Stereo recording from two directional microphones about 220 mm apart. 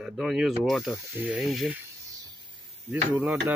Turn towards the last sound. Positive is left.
turn(degrees=-5)  # may be behind; listen again after turning